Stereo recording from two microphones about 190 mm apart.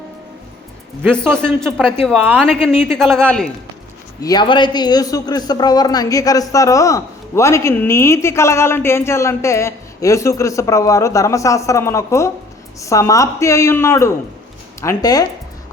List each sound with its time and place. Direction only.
1.2 s a man's voice: 10° right (ahead or behind)
1.6 s speech: 5° left (ahead or behind)
2.1 s a man's voice: 10° right (ahead or behind)
2.4 s speech: 5° left (ahead or behind)
4.2 s a man's voice: 20° left (ahead or behind)